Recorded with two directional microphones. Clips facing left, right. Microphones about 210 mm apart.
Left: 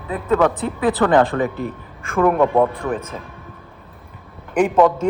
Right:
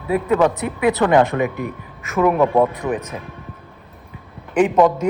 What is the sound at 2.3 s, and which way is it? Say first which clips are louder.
Speech: even; centre (ahead or behind).